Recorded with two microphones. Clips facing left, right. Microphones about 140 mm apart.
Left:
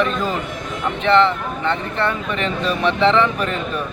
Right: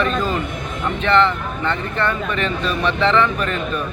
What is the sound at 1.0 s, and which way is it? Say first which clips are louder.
Speech: left 2 dB; 20° left (ahead or behind).